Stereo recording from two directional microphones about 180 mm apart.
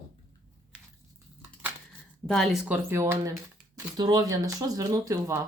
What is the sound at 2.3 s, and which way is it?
Speech, centre (ahead or behind).